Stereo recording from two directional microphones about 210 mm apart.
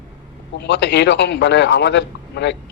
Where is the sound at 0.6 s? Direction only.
55° left (ahead or behind).